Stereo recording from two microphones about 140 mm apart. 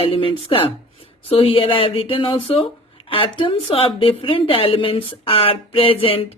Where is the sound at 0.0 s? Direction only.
40° left (ahead or behind).